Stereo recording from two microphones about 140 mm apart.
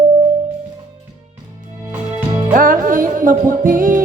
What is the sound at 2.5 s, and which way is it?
Music, 75° right (ahead or behind).